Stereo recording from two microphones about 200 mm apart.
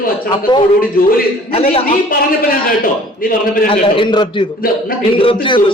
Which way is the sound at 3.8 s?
25° left (ahead or behind).